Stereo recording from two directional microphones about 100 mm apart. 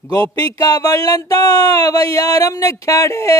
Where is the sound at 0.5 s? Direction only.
40° left (ahead or behind).